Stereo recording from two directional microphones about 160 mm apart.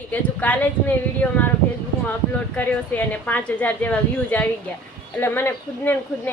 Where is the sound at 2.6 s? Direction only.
10° left (ahead or behind).